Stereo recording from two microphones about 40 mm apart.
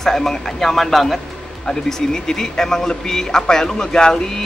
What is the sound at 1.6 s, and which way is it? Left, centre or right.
A man's voice, centre.